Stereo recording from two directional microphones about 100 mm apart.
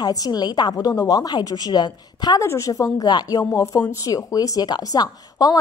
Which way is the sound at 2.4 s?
30° left (ahead or behind).